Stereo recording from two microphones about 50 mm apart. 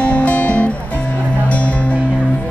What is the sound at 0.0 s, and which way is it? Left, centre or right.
Music, left.